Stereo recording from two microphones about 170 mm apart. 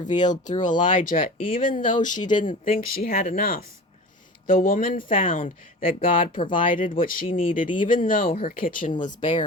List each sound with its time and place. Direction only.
0.3 s speech: 45° left (ahead or behind)
2.1 s speech: 25° left (ahead or behind)
2.5 s speech: 55° left (ahead or behind)
8.9 s speech: 30° left (ahead or behind)